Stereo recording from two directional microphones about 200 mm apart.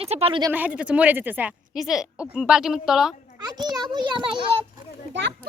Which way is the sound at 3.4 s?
20° right (ahead or behind).